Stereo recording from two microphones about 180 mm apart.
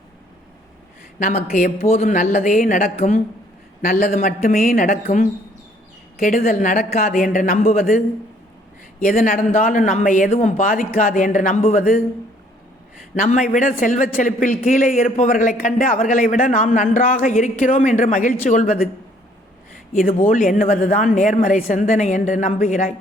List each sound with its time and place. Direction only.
1.2 s a man's voice: 45° left (ahead or behind)
1.8 s a man's voice: 35° left (ahead or behind)
9.0 s a man's voice: 50° left (ahead or behind)
13.2 s a man's voice: 45° left (ahead or behind)
19.7 s a sound: 50° left (ahead or behind)
20.1 s a man's voice: 40° left (ahead or behind)